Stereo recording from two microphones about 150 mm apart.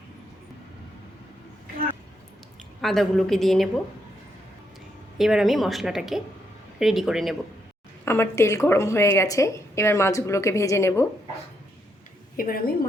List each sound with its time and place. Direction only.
2.8 s a woman's voice: centre (ahead or behind)
5.1 s a woman's voice: centre (ahead or behind)
8.0 s a woman's voice: 15° left (ahead or behind)
12.4 s a woman's voice: 75° left (ahead or behind)